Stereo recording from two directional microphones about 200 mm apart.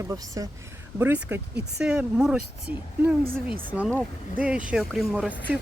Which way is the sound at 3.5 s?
20° left (ahead or behind).